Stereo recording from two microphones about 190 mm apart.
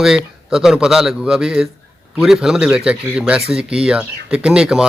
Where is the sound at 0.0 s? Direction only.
5° right (ahead or behind).